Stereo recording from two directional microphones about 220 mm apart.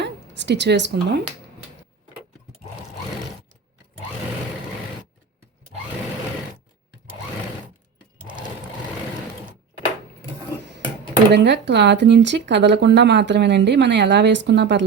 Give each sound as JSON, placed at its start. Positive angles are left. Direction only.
{"t": 0.0, "sound": "speech", "side_deg": -50}
{"t": 11.3, "sound": "speech", "side_deg": -50}